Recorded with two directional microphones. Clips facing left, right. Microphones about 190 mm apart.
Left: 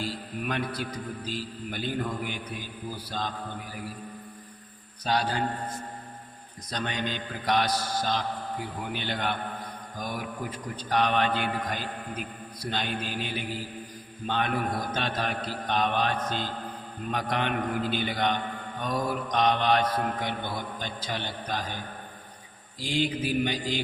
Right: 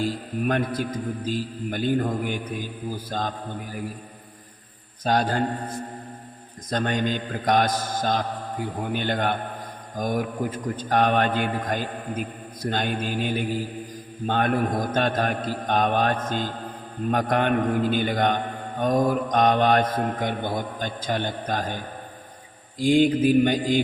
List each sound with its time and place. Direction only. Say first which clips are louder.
0.0 s a man's voice: right 7 dB; 45° right (ahead or behind)
5.0 s a man's voice: right 5 dB; 50° right (ahead or behind)
6.7 s a man's voice: right 7 dB; 50° right (ahead or behind)
22.8 s a man's voice: right 10 dB; 50° right (ahead or behind)